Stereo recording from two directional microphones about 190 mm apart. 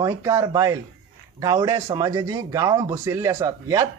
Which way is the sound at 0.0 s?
15° right (ahead or behind).